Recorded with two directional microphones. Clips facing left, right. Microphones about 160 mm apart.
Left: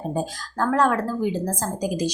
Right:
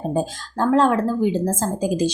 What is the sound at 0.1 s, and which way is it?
A woman's voice, 25° right (ahead or behind).